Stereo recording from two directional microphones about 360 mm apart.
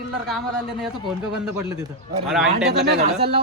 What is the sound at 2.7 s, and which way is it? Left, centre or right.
Speech, right.